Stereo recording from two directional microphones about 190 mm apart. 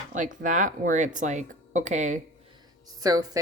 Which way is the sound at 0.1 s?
45° right (ahead or behind).